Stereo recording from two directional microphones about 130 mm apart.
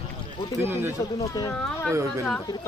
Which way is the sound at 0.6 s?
20° right (ahead or behind).